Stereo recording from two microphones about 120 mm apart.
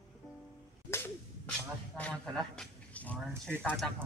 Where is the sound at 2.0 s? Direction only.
5° left (ahead or behind).